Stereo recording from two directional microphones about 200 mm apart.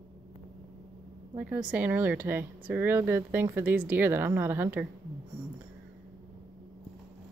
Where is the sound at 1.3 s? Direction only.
5° right (ahead or behind).